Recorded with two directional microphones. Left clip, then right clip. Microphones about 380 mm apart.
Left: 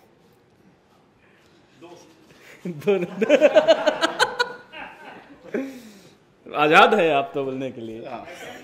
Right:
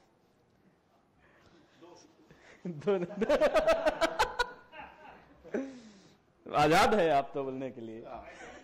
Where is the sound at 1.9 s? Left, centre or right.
Right.